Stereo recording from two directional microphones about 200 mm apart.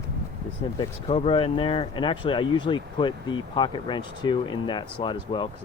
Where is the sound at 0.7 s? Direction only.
30° left (ahead or behind).